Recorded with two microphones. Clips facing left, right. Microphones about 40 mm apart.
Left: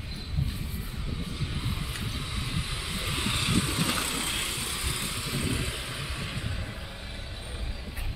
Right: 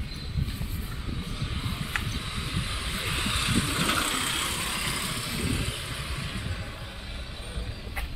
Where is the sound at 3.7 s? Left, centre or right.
Right.